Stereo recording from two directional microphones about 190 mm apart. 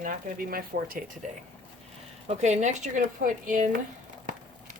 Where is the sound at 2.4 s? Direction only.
40° right (ahead or behind).